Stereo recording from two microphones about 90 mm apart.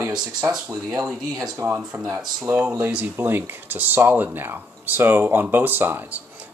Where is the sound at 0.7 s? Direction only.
35° right (ahead or behind).